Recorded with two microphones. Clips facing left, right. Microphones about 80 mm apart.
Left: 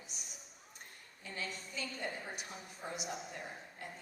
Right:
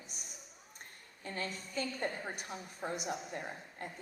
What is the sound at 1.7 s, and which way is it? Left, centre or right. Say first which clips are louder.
A woman's voice: right 5 dB; right.